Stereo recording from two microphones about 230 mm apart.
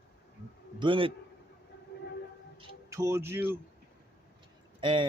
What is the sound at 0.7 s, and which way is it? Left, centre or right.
Speech, right.